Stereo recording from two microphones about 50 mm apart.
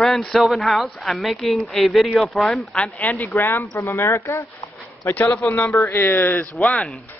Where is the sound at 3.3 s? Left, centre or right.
Left.